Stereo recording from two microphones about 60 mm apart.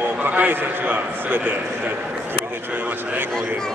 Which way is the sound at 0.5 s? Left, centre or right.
Right.